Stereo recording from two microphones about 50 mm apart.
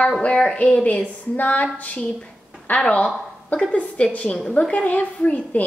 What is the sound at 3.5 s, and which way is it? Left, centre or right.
Speech, left.